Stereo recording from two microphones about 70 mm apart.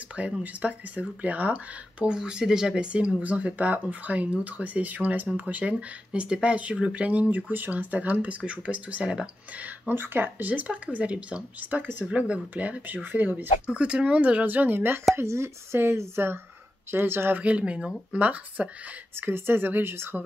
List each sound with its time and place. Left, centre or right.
0.1 s speech: centre
2.1 s speech: centre
9.9 s speech: right
13.7 s speech: centre; by 15.0 s right
15.1 s speech: right
17.4 s speech: centre
19.1 s speech: right